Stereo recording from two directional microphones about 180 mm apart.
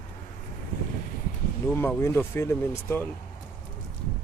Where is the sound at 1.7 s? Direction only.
15° left (ahead or behind).